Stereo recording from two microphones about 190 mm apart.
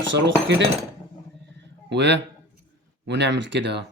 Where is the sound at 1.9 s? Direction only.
65° right (ahead or behind).